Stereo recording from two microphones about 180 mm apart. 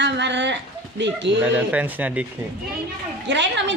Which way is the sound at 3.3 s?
85° right.